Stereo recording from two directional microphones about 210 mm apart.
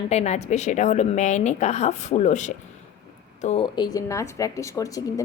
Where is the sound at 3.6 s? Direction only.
20° left (ahead or behind).